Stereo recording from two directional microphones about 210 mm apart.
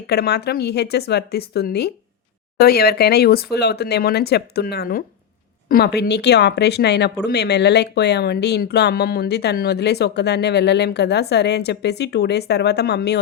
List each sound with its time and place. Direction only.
0.1 s speech: 50° left (ahead or behind)